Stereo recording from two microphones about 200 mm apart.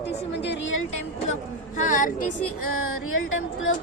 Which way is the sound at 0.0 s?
60° left (ahead or behind).